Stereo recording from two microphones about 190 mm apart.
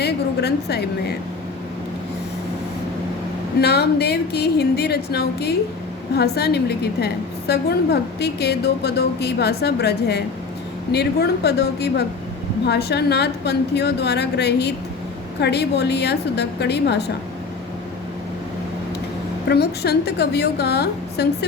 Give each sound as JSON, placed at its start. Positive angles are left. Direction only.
{"t": 0.0, "sound": "a sound", "side_deg": 60}
{"t": 3.6, "sound": "a woman's voice", "side_deg": 60}
{"t": 19.5, "sound": "a woman's voice", "side_deg": 60}